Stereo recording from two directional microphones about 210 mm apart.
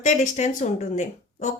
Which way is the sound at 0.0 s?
35° left (ahead or behind).